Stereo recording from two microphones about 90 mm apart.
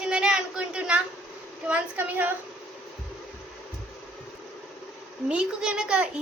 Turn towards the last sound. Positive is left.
turn(degrees=-10)  # may be behind; listen again after turning